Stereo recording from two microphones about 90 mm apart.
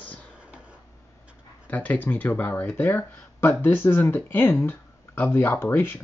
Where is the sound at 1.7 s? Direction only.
20° left (ahead or behind).